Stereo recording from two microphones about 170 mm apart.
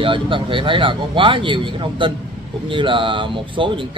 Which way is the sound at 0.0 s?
30° right (ahead or behind).